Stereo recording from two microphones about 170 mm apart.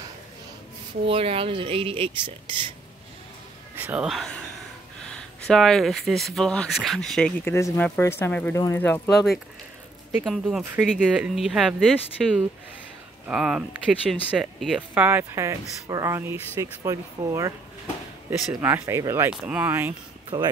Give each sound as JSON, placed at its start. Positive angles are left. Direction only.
{"t": 1.0, "sound": "speech", "side_deg": -35}
{"t": 3.7, "sound": "speech", "side_deg": -10}
{"t": 5.5, "sound": "speech", "side_deg": 0}
{"t": 10.2, "sound": "speech", "side_deg": 0}